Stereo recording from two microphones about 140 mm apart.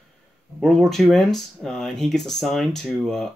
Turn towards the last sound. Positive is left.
turn(degrees=5)  # may be behind; listen again after turning